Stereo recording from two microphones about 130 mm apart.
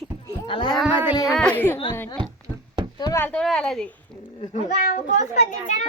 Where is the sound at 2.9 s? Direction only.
30° left (ahead or behind).